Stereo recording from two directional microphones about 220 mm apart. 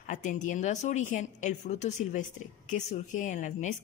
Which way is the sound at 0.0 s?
35° left (ahead or behind).